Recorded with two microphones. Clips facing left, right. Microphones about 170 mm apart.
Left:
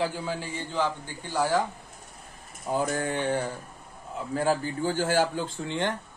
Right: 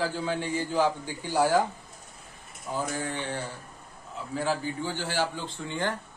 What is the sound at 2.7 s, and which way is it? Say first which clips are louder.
Mantra: left 5 dB; 40° left (ahead or behind).